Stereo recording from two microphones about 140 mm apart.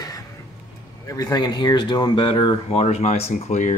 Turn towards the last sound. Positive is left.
turn(degrees=60)  # may be behind; listen again after turning